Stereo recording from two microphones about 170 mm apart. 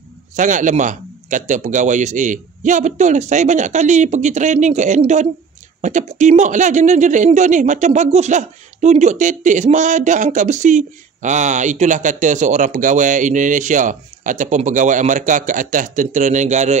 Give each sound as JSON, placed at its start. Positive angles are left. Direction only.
{"t": 0.4, "sound": "a man's voice", "side_deg": -45}